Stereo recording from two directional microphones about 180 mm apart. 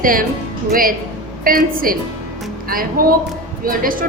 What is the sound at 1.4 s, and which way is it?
A woman's voice, 50° right (ahead or behind).